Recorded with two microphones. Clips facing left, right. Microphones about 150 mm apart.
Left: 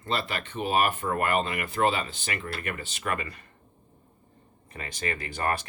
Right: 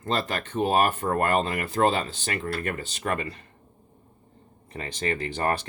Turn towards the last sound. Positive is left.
turn(degrees=-30)  # may be behind; listen again after turning